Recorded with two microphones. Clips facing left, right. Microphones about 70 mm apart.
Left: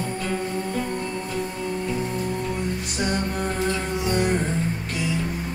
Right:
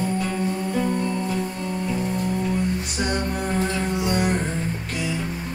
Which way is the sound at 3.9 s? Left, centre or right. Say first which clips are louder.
Even; centre.